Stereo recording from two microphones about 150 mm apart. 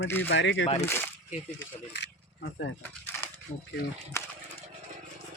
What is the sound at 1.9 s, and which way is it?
Keys jangling, 90° left.